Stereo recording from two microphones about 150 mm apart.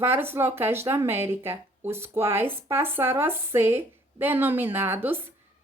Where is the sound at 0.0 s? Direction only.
15° right (ahead or behind).